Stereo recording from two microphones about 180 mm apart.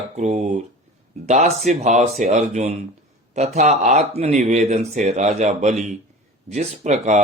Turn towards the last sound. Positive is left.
turn(degrees=-40)  # may be behind; listen again after turning